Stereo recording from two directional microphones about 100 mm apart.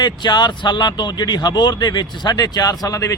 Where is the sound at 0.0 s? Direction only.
45° left (ahead or behind).